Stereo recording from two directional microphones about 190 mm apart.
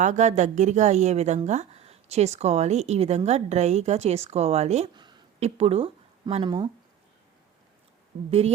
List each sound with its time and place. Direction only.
0.0 s a woman's voice: 40° right (ahead or behind)
4.9 s speech: 25° right (ahead or behind)
8.3 s a woman's voice: 35° right (ahead or behind)